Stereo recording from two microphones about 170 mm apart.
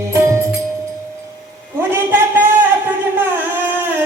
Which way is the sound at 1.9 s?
10° right (ahead or behind).